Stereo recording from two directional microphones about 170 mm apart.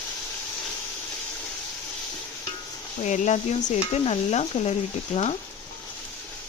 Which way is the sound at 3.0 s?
45° left (ahead or behind).